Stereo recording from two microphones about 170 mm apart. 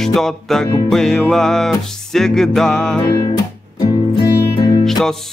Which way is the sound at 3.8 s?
25° left (ahead or behind).